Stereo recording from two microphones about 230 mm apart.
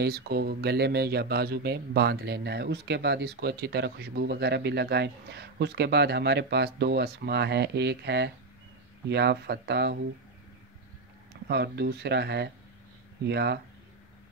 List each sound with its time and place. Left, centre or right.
0.0 s speech: right
11.4 s speech: right